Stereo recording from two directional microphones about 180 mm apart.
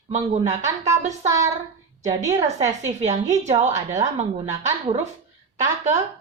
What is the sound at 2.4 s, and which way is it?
A woman's voice, 40° right (ahead or behind).